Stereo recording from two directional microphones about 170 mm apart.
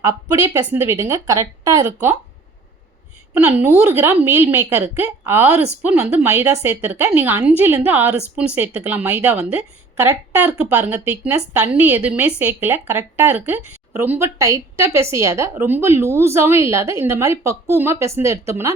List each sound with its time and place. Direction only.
0.0 s a woman's voice: 20° right (ahead or behind)
3.8 s a woman's voice: 10° right (ahead or behind)